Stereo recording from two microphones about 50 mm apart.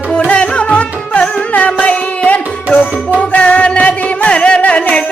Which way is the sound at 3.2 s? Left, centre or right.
Left.